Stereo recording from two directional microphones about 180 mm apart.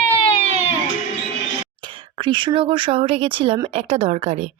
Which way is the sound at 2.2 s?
25° right (ahead or behind).